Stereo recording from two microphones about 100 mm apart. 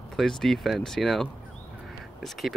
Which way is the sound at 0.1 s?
5° left (ahead or behind).